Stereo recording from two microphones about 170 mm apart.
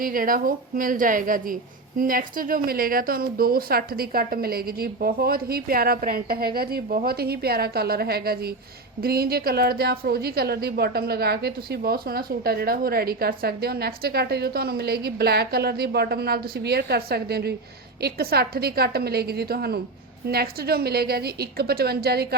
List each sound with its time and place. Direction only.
0.0 s a woman's voice: 55° right (ahead or behind)